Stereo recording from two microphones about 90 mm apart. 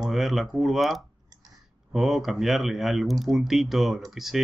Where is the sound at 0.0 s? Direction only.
Centre (ahead or behind).